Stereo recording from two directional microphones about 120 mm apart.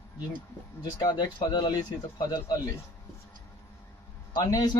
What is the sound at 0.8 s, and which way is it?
Speech, 35° left (ahead or behind).